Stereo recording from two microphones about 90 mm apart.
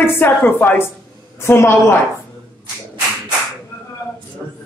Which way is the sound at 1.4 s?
25° left (ahead or behind).